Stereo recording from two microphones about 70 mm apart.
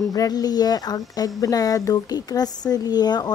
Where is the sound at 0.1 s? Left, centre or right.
Left.